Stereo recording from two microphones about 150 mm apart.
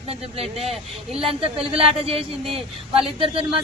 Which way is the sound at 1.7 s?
40° right (ahead or behind).